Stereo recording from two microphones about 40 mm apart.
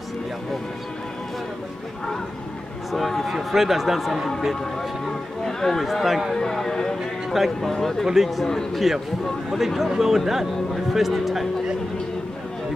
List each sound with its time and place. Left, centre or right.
2.9 s a man's voice: centre
3.3 s a man's voice: centre
5.0 s a man's voice: centre
6.3 s speech: centre
7.3 s a man's voice: centre